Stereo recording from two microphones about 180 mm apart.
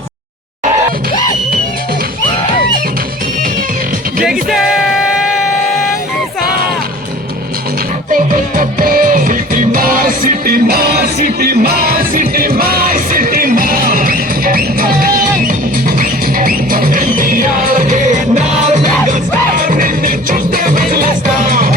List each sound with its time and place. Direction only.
8.1 s music: 50° right (ahead or behind)